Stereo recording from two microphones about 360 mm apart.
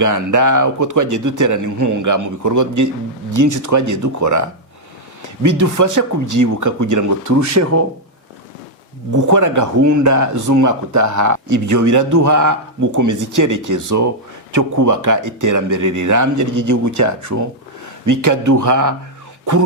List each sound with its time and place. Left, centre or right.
0.0 s speech: right
9.1 s speech: right